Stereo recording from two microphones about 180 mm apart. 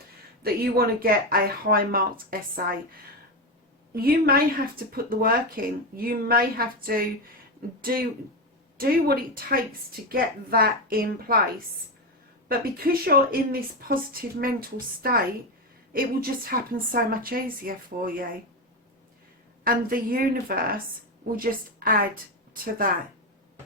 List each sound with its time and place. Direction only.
0.4 s speech: 55° right (ahead or behind)
3.9 s speech: 55° right (ahead or behind)
12.5 s a woman's voice: 55° right (ahead or behind)
19.6 s a woman's voice: 55° right (ahead or behind)